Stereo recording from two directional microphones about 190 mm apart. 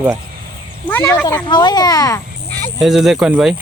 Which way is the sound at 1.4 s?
25° left (ahead or behind).